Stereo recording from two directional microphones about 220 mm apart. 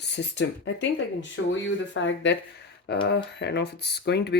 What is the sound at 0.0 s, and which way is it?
Speech, 50° left (ahead or behind).